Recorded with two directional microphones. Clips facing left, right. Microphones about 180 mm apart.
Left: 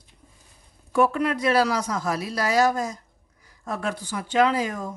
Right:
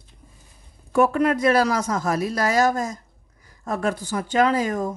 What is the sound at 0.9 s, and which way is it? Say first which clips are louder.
Speech: right 3 dB; 45° right (ahead or behind).